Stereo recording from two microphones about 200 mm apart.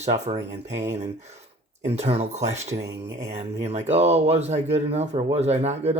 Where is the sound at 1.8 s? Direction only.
30° right (ahead or behind).